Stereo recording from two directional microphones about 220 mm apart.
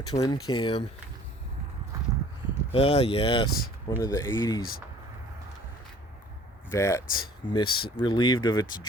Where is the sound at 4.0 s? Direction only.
10° left (ahead or behind).